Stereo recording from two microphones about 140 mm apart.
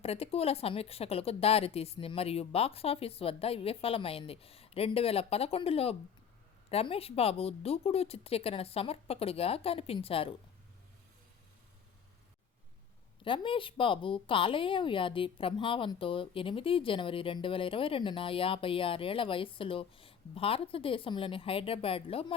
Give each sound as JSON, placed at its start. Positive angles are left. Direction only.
{"t": 0.0, "sound": "a woman's voice", "side_deg": 45}
{"t": 13.2, "sound": "a woman's voice", "side_deg": 35}